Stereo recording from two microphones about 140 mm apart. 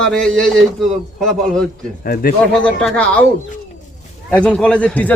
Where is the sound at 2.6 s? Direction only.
10° left (ahead or behind).